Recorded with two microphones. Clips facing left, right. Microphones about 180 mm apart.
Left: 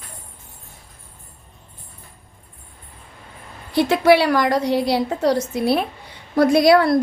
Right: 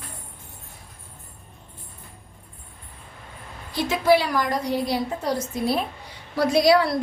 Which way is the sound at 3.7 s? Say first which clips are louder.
Left 5 dB; 65° left (ahead or behind).